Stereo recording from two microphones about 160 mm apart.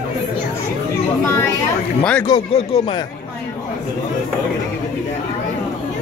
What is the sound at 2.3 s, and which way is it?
Speech, 45° left (ahead or behind).